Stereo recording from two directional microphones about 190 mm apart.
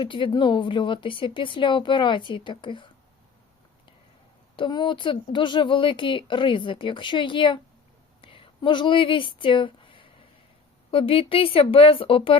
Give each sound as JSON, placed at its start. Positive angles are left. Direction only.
{"t": 0.0, "sound": "speech", "side_deg": 25}
{"t": 4.5, "sound": "speech", "side_deg": 25}
{"t": 8.2, "sound": "a sound", "side_deg": 25}
{"t": 10.9, "sound": "speech", "side_deg": 30}